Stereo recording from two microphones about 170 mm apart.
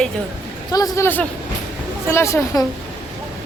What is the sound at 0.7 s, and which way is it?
Speech, 20° left (ahead or behind).